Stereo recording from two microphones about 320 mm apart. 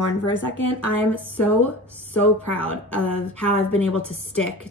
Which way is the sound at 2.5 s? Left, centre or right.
Centre.